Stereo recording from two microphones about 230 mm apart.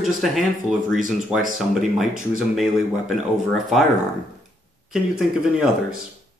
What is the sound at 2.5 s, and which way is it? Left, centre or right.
Speech, centre.